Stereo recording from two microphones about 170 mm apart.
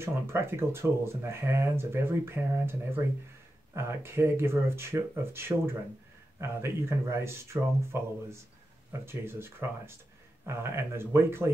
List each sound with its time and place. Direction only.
0.0 s speech: 15° right (ahead or behind)
3.7 s speech: 15° right (ahead or behind)